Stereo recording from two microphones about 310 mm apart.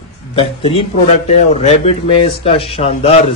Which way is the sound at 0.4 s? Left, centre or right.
Centre.